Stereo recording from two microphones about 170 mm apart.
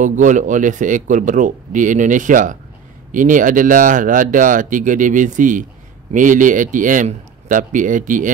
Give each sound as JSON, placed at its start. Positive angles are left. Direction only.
{"t": 0.0, "sound": "speech", "side_deg": -50}